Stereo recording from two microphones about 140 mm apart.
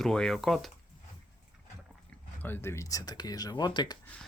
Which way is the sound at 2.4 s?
15° left (ahead or behind).